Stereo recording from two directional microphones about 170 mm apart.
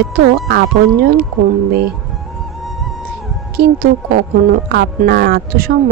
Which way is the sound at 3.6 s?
65° right (ahead or behind).